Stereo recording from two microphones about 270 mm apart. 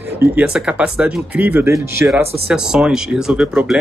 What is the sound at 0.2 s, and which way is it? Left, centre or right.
Speech, centre.